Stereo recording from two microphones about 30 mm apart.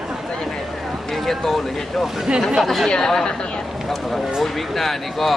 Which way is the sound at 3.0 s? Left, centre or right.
Centre.